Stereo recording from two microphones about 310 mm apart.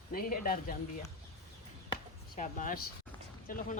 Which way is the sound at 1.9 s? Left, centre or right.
Left.